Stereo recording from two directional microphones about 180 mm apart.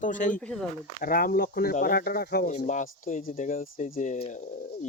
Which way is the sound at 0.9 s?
50° left (ahead or behind).